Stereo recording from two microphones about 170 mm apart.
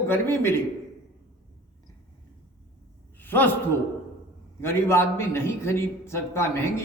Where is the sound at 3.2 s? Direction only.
10° left (ahead or behind).